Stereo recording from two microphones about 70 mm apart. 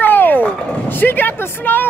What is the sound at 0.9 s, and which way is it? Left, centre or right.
Speech, left.